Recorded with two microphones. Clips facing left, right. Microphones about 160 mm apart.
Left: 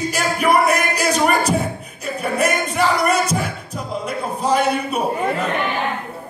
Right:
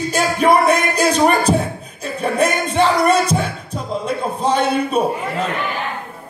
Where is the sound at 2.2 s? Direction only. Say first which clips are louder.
Right 2 dB; 30° right (ahead or behind).